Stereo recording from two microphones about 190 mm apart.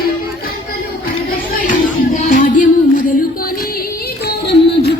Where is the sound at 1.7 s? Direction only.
45° left (ahead or behind).